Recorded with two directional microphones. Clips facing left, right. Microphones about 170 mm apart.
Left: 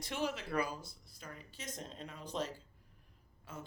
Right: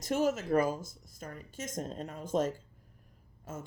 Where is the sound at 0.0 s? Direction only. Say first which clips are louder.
Right 9 dB; 45° right (ahead or behind).